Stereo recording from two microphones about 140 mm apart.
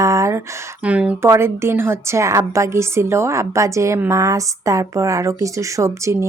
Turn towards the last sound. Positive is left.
turn(degrees=-20)  # may be behind; listen again after turning